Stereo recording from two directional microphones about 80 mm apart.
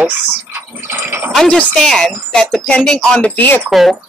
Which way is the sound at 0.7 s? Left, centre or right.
Right.